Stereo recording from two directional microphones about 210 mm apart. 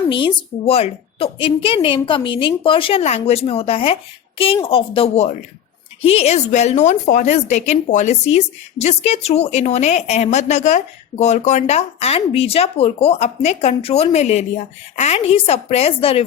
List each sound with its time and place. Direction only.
0.1 s a woman's voice: 25° left (ahead or behind)